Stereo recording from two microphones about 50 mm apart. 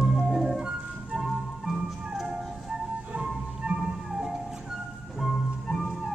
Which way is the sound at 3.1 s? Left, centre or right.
Centre.